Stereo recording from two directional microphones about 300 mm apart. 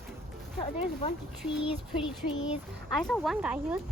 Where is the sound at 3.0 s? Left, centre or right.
Centre.